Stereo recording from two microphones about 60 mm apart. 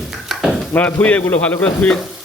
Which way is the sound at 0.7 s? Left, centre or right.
Left.